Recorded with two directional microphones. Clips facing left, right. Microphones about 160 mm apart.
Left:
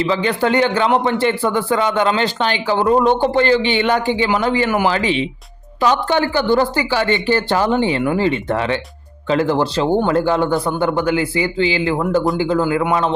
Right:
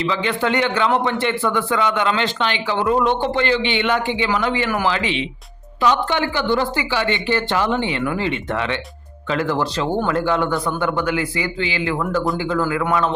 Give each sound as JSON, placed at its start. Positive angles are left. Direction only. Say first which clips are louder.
{"t": 0.0, "sound": "speech", "louder": "left 4 dB", "side_deg": 35}